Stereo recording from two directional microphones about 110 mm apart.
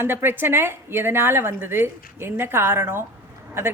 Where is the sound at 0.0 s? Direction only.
20° right (ahead or behind).